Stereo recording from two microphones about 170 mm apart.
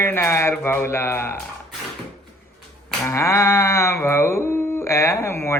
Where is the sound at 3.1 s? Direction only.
15° left (ahead or behind).